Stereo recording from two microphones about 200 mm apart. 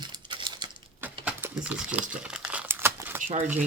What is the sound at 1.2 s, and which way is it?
Crumpling, 5° right (ahead or behind).